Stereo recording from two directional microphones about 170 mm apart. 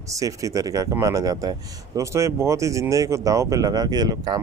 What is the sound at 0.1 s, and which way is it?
Speech, 20° right (ahead or behind).